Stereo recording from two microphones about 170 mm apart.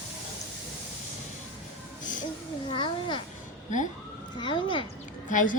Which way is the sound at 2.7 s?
30° left (ahead or behind).